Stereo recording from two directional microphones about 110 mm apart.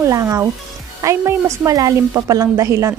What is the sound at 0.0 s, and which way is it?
A woman's voice, 25° right (ahead or behind).